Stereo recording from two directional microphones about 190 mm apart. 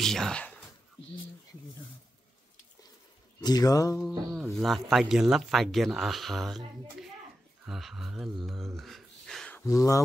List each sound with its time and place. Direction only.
0.0 s speech: centre (ahead or behind)
3.4 s a sound: 20° left (ahead or behind)
4.3 s speech: centre (ahead or behind); by 10.0 s 15° left (ahead or behind)